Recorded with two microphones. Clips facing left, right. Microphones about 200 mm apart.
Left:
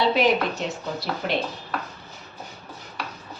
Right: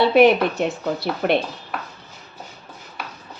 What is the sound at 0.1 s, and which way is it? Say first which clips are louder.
A woman's voice: right 7 dB; 60° right (ahead or behind).